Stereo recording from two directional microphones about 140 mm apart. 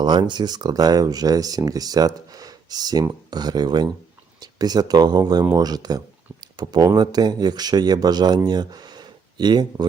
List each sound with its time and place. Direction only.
0.0 s speech: 35° right (ahead or behind)